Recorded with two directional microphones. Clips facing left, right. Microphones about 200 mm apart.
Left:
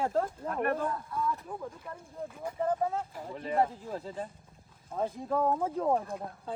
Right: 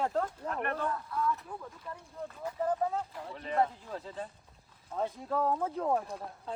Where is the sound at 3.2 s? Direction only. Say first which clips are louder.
Left 2 dB; 40° left (ahead or behind).